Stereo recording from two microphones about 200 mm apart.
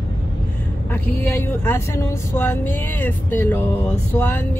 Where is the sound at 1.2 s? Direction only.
10° left (ahead or behind).